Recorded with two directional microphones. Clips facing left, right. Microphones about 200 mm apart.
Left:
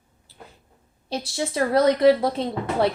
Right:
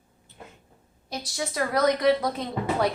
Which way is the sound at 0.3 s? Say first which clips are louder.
Even; 35° left (ahead or behind).